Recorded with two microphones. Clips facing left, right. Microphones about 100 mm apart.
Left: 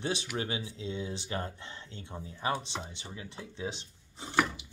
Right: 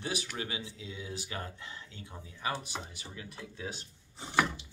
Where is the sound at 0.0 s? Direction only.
25° left (ahead or behind).